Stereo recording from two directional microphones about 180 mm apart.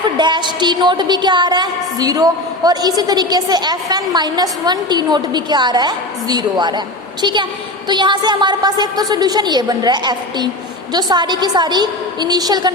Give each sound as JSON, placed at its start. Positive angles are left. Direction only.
{"t": 0.2, "sound": "a woman's voice", "side_deg": -25}